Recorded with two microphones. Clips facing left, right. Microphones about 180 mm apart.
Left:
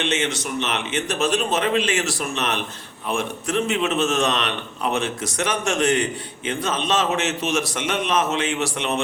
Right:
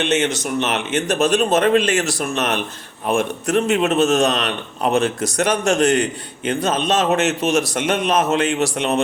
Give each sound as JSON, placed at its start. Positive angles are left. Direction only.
{"t": 0.0, "sound": "a man's voice", "side_deg": -45}